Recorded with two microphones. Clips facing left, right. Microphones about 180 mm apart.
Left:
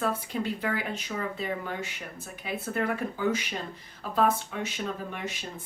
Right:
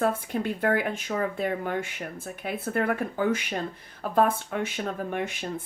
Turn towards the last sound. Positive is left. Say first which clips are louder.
# right 6 dB
turn(degrees=-55)  # may be behind; listen again after turning